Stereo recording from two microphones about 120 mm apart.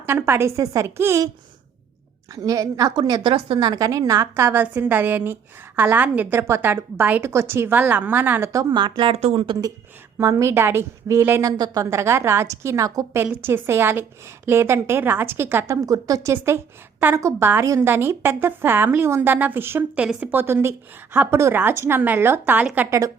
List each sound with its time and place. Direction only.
0.0 s a woman's voice: 20° right (ahead or behind)
2.3 s a woman's voice: 30° right (ahead or behind)
3.3 s speech: 50° right (ahead or behind)
3.7 s a woman's voice: 30° right (ahead or behind)
8.7 s speech: 40° right (ahead or behind)
9.1 s speech: 60° right (ahead or behind)
9.4 s speech: 45° right (ahead or behind)
10.2 s a woman's voice: 25° right (ahead or behind)
11.5 s a woman's voice: 35° right (ahead or behind); by 22.9 s 15° right (ahead or behind)
22.9 s a woman's voice: 25° right (ahead or behind)